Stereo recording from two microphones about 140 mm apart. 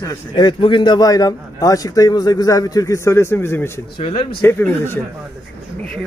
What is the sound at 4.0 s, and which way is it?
Speech, 40° left (ahead or behind).